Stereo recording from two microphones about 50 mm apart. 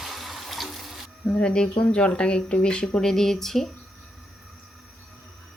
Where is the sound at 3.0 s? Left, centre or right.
Centre.